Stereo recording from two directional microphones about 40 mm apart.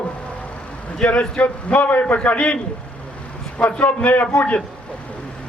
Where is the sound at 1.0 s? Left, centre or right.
Left.